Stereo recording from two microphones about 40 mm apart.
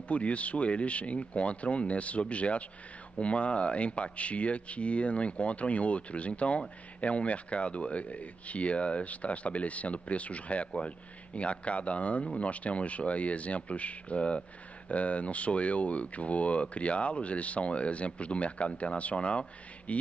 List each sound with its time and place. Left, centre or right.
0.1 s speech: left